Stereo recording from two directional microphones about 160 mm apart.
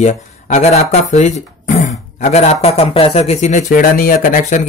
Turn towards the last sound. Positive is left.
turn(degrees=55)  # may be behind; listen again after turning